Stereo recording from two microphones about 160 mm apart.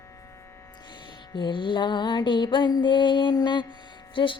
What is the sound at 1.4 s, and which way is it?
Mantra, 30° left (ahead or behind).